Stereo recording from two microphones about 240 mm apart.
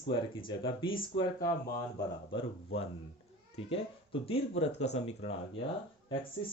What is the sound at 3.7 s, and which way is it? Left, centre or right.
Speech, left.